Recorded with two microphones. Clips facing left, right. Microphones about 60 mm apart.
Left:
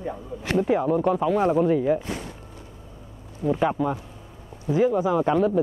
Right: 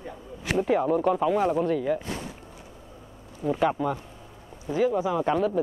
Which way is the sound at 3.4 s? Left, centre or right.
Centre.